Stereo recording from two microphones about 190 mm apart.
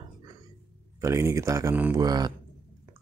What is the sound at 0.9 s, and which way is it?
Speech, 15° right (ahead or behind).